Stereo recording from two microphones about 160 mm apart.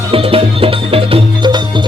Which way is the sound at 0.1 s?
35° right (ahead or behind).